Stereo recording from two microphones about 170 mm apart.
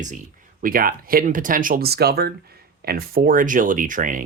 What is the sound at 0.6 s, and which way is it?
Speech, 55° right (ahead or behind).